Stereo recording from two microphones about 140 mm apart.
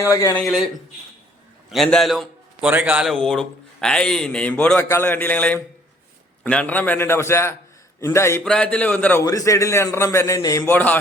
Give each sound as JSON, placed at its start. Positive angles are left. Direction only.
{"t": 0.0, "sound": "a man's voice", "side_deg": 20}
{"t": 0.3, "sound": "a man's voice", "side_deg": 0}
{"t": 1.7, "sound": "a man's voice", "side_deg": 0}
{"t": 8.4, "sound": "a man's voice", "side_deg": 10}
{"t": 9.2, "sound": "a man's voice", "side_deg": 25}